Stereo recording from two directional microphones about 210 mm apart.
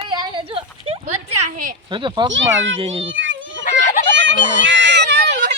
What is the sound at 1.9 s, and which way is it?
A child's voice, 20° right (ahead or behind).